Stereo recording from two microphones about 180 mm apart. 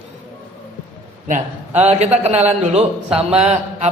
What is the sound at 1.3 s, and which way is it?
A man's voice, 40° right (ahead or behind).